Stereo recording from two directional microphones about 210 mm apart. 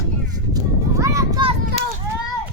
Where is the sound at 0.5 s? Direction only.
15° right (ahead or behind).